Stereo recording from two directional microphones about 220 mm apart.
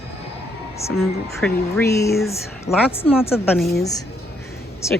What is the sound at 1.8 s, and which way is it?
A woman's voice, 15° left (ahead or behind).